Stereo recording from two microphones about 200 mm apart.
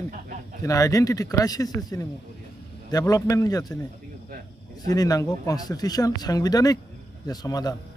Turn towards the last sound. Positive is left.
turn(degrees=20)  # may be behind; listen again after turning